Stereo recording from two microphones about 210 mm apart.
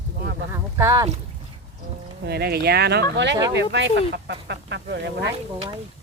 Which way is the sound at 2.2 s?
50° right (ahead or behind).